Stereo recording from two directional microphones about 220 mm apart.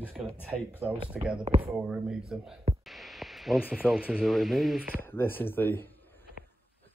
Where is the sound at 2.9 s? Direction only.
Centre (ahead or behind).